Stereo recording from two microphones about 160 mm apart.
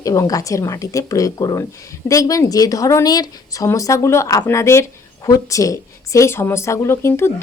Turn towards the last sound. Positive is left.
turn(degrees=15)  # may be behind; listen again after turning